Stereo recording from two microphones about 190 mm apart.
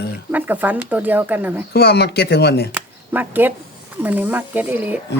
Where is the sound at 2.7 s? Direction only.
10° right (ahead or behind).